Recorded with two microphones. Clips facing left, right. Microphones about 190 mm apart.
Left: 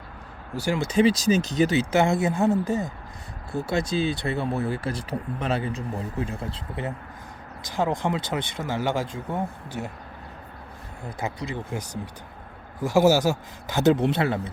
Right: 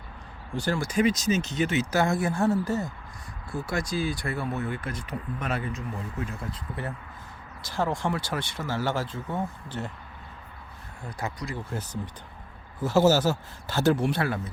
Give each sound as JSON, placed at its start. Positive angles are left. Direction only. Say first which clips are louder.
{"t": 0.5, "sound": "speech", "louder": "left 2 dB", "side_deg": 10}
{"t": 0.8, "sound": "speech", "louder": "left 5 dB", "side_deg": 25}
{"t": 11.2, "sound": "speech", "louder": "left 3 dB", "side_deg": 20}